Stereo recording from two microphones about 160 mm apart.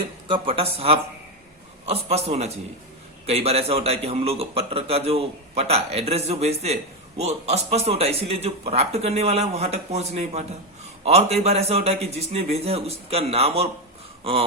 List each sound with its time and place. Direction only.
0.3 s a man's voice: 35° right (ahead or behind)